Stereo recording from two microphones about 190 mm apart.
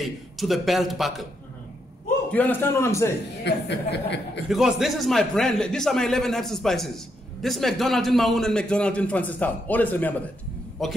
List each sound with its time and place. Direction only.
0.0 s a man's voice: centre (ahead or behind)
2.3 s a man's voice: 10° left (ahead or behind)
3.4 s speech: 65° left (ahead or behind)
4.5 s a man's voice: centre (ahead or behind)